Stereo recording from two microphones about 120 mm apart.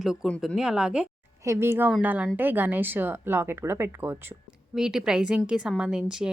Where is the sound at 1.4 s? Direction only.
20° right (ahead or behind).